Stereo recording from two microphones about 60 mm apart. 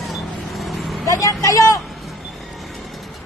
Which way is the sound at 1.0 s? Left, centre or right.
Left.